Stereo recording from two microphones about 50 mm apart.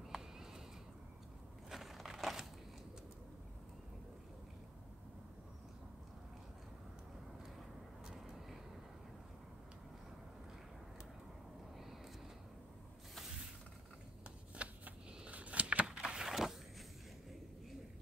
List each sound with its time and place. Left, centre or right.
1.7 s crushing: centre
8.1 s vehicle: centre
14.6 s a sound: right; by 16.5 s centre